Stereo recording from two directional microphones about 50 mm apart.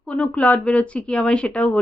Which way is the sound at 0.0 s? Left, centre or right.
Left.